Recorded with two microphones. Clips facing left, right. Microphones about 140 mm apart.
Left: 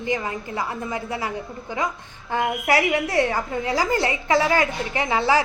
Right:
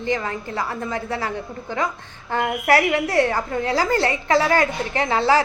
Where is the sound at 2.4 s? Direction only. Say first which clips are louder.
Right 3 dB; 45° right (ahead or behind).